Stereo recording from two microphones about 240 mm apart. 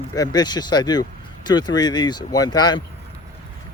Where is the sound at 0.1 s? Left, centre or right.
Centre.